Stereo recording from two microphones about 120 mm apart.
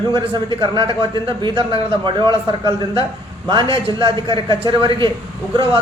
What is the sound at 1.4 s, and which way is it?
Speech, 40° right (ahead or behind).